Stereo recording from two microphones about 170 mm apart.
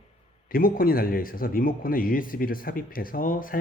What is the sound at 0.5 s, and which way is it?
Speech, 55° left (ahead or behind).